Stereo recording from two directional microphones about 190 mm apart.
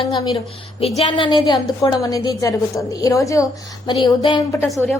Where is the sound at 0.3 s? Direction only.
30° left (ahead or behind).